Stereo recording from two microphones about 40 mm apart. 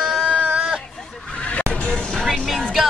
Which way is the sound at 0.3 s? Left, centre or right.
Right.